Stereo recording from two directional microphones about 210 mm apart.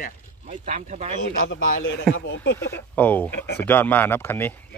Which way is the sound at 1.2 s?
60° left (ahead or behind).